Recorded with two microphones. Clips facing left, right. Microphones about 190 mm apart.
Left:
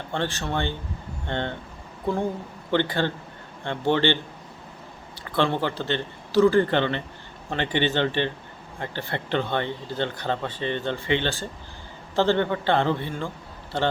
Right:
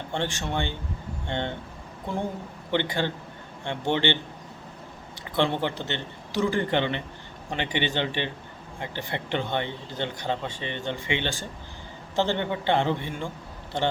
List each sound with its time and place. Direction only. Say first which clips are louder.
0.1 s a man's voice: left 2 dB; 15° right (ahead or behind)
2.7 s a man's voice: left 3 dB; 15° right (ahead or behind)
5.2 s a man's voice: left 1 dB; 20° right (ahead or behind)